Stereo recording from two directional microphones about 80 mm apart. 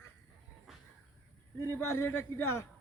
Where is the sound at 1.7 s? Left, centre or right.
Left.